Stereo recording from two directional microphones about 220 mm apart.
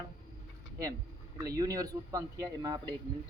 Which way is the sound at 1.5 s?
15° right (ahead or behind).